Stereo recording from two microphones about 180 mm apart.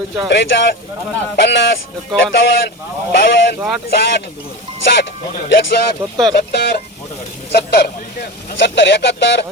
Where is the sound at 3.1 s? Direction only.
80° left.